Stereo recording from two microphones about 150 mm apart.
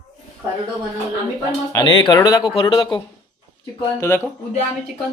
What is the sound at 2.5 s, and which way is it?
Speech, 35° left (ahead or behind).